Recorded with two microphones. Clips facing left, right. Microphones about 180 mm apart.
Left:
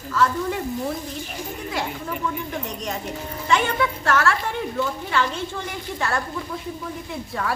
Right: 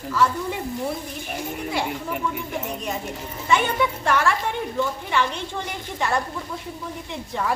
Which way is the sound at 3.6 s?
15° right (ahead or behind).